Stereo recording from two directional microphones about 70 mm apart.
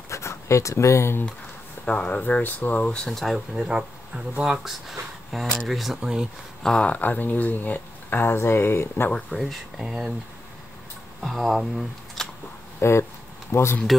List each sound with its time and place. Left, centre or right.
0.1 s speech: left
1.9 s speech: centre
3.1 s speech: centre
5.9 s speech: centre
6.6 s speech: centre; by 9.1 s left
9.3 s speech: centre
11.2 s speech: centre
12.8 s speech: left